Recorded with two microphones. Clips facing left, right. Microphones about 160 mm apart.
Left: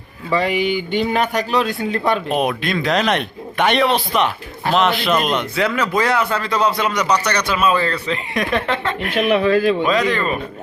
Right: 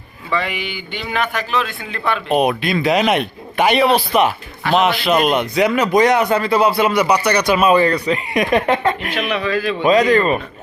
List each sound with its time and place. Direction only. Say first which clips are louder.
0.3 s speech: left 5 dB; 40° left (ahead or behind)
2.3 s speech: right 3 dB; 5° right (ahead or behind)
9.1 s speech: left 5 dB; 45° left (ahead or behind)
9.8 s speech: right 5 dB; 40° right (ahead or behind)